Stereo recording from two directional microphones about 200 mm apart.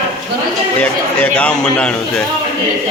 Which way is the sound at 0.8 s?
5° left (ahead or behind).